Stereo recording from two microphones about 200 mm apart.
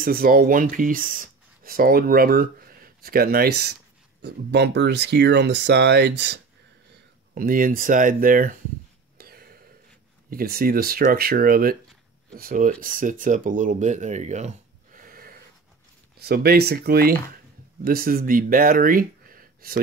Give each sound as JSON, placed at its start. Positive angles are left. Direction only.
{"t": 0.0, "sound": "speech", "side_deg": -45}
{"t": 7.3, "sound": "speech", "side_deg": -45}
{"t": 9.2, "sound": "a sound", "side_deg": -50}
{"t": 10.3, "sound": "speech", "side_deg": -50}